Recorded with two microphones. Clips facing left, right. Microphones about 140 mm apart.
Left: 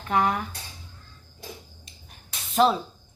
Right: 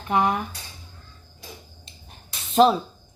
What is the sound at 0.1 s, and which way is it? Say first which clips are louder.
Child singing: right 2 dB; 20° right (ahead or behind).